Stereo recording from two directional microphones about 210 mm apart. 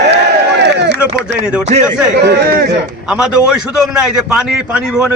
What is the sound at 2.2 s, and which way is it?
Speech, 45° right (ahead or behind).